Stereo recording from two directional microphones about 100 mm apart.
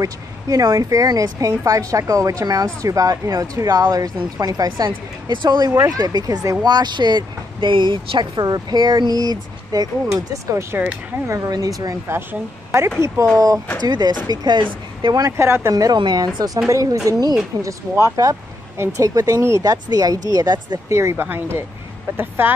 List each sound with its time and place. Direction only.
0.0 s speech: 35° right (ahead or behind)
5.8 s speech: 35° right (ahead or behind)
12.1 s a woman's voice: 25° right (ahead or behind)
13.8 s speech: 45° right (ahead or behind)
15.2 s a woman's voice: 25° right (ahead or behind)
15.7 s speech: 40° right (ahead or behind)
20.9 s a woman's voice: 30° right (ahead or behind)